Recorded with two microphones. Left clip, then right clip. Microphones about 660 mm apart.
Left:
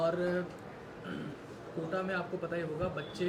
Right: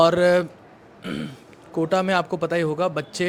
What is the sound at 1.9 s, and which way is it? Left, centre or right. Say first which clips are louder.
Speech: right 14 dB; right.